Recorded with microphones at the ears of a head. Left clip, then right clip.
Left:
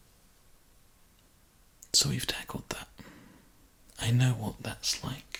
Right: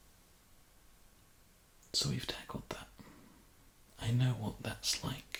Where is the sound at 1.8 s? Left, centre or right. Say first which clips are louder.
Left 8 dB; left.